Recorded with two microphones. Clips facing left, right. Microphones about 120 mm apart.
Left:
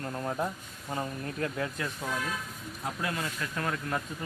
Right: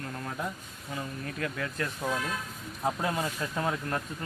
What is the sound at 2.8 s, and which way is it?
Speech, 30° right (ahead or behind).